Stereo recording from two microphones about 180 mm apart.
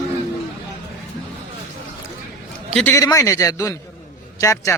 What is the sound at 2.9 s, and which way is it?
Speech, 20° left (ahead or behind).